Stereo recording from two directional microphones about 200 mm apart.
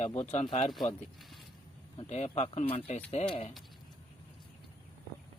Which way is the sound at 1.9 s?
35° left (ahead or behind).